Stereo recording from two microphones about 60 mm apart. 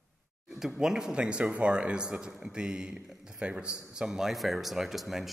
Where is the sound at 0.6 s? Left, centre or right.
Centre.